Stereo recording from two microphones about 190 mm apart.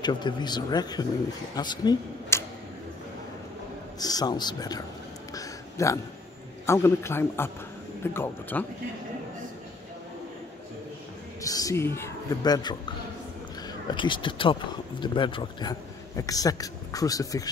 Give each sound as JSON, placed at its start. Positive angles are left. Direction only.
{"t": 0.0, "sound": "speech", "side_deg": 25}
{"t": 4.0, "sound": "speech", "side_deg": 20}
{"t": 5.3, "sound": "a sound", "side_deg": 15}
{"t": 6.6, "sound": "speech", "side_deg": 15}
{"t": 11.4, "sound": "speech", "side_deg": 20}
{"t": 13.8, "sound": "speech", "side_deg": 25}